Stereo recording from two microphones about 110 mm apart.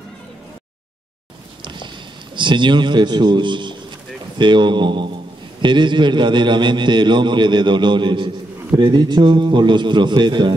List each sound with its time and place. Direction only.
1.6 s walk: 45° right (ahead or behind)
2.3 s a man's voice: 45° right (ahead or behind)